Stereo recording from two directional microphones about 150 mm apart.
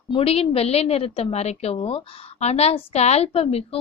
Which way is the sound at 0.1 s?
40° left (ahead or behind).